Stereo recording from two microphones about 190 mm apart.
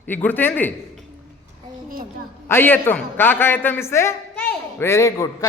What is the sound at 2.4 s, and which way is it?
A man's voice, 10° left (ahead or behind).